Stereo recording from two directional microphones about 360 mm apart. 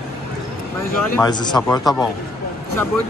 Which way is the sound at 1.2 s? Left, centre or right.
Centre.